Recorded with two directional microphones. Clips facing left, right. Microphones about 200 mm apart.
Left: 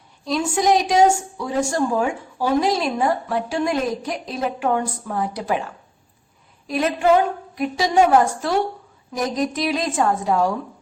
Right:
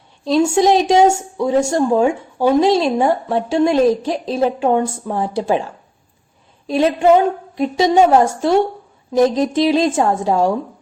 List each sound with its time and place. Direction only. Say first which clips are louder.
0.3 s a woman's voice: right 6 dB; 25° right (ahead or behind)
6.7 s a woman's voice: right 5 dB; 25° right (ahead or behind)